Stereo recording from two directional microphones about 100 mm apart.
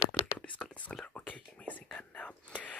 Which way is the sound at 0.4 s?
10° left (ahead or behind).